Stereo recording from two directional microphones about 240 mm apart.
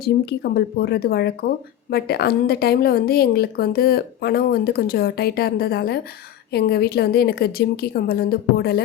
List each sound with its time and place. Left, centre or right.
0.0 s speech: left